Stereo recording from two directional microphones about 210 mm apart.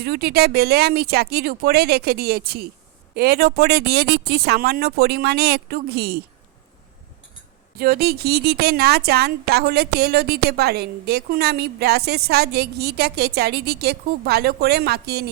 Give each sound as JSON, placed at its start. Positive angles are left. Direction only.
{"t": 0.0, "sound": "a woman's voice", "side_deg": -50}
{"t": 7.8, "sound": "a woman's voice", "side_deg": -45}